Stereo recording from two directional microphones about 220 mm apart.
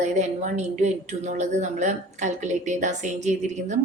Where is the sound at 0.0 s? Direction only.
30° right (ahead or behind).